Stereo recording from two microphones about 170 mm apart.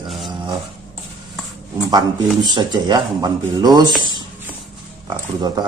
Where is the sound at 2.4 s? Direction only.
25° right (ahead or behind).